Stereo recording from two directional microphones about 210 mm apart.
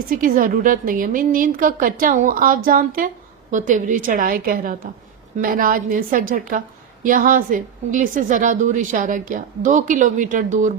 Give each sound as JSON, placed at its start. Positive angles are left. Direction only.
{"t": 0.1, "sound": "a woman's voice", "side_deg": -40}